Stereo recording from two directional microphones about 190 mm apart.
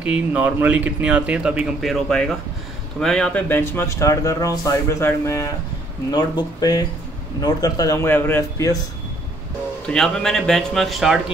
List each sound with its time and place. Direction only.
0.0 s speech: 5° right (ahead or behind); by 8.7 s 15° left (ahead or behind)
9.8 s speech: 5° left (ahead or behind)